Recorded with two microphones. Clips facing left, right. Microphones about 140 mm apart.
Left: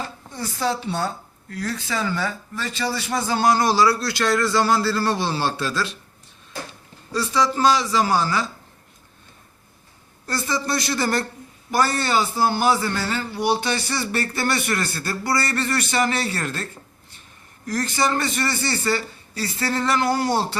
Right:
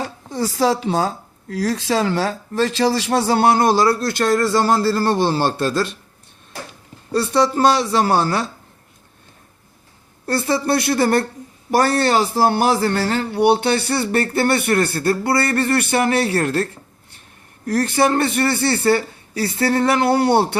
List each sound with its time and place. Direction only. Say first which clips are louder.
0.0 s a man's voice: right 7 dB; 90° right; by 5.9 s 50° right (ahead or behind)
7.1 s a man's voice: right 5 dB; 55° right (ahead or behind)
10.2 s a man's voice: right 6 dB; 60° right (ahead or behind)
17.7 s a man's voice: right 6 dB; 60° right (ahead or behind)